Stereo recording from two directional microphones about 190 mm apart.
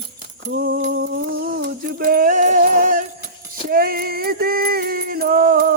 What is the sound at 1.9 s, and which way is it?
Jingle bell, 50° right (ahead or behind).